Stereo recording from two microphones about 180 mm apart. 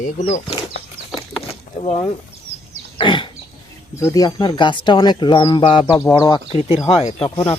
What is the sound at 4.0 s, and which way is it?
Speech, 20° left (ahead or behind).